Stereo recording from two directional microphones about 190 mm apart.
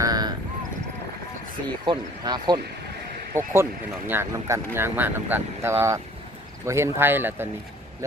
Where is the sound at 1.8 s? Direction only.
20° right (ahead or behind).